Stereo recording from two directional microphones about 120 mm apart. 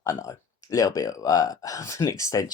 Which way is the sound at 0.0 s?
30° left (ahead or behind).